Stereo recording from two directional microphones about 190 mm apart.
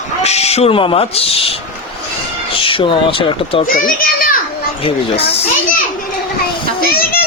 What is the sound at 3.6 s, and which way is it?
Speech, 50° left (ahead or behind).